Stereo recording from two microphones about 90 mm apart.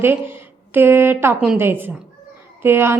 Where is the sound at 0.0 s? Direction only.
25° right (ahead or behind).